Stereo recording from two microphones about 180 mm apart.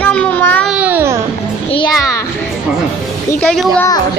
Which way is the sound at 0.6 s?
5° right (ahead or behind).